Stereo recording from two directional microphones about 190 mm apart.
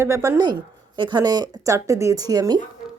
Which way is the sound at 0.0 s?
15° right (ahead or behind).